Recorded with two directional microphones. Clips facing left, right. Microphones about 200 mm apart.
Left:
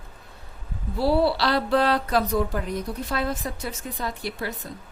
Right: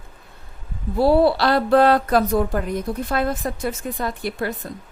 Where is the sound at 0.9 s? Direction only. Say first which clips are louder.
Right 5 dB; 50° right (ahead or behind).